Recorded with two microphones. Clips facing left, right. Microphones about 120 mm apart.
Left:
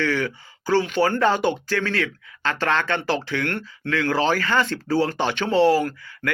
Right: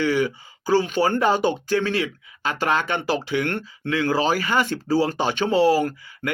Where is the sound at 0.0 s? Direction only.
15° right (ahead or behind).